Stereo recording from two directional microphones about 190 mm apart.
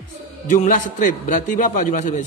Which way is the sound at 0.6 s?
45° left (ahead or behind).